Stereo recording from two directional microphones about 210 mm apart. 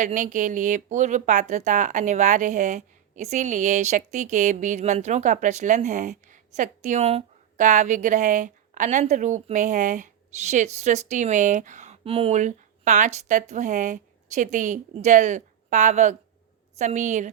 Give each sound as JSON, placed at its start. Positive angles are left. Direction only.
{"t": 0.0, "sound": "speech", "side_deg": -35}